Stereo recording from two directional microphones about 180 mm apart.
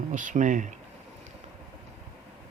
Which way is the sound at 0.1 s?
45° right (ahead or behind).